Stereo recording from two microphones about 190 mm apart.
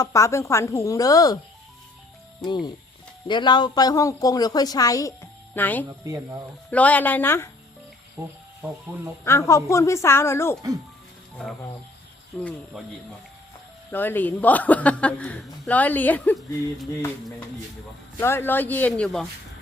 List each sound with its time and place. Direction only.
0.0 s a woman's voice: 15° left (ahead or behind)
3.2 s a woman's voice: 25° left (ahead or behind)
8.2 s speech: 5° right (ahead or behind)
9.2 s a woman's voice: 15° left (ahead or behind)
12.4 s a woman's voice: 5° left (ahead or behind)
13.9 s a woman's voice: 10° left (ahead or behind)
18.2 s a woman's voice: 10° left (ahead or behind)